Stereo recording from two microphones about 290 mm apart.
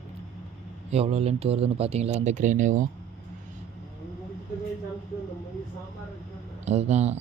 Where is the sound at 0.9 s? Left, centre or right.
Right.